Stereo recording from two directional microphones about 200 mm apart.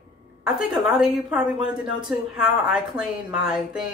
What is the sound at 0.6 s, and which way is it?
A woman's voice, centre (ahead or behind).